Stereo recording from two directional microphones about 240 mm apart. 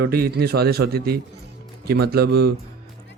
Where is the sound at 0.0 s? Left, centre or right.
Right.